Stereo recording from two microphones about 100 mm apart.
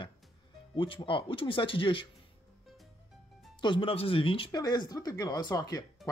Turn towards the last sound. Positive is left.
turn(degrees=40)  # may be behind; listen again after turning